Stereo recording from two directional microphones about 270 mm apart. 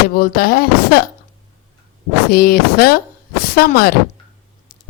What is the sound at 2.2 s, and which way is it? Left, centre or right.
A woman's voice, left.